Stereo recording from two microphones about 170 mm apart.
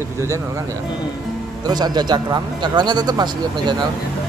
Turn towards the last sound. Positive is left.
turn(degrees=-25)  # may be behind; listen again after turning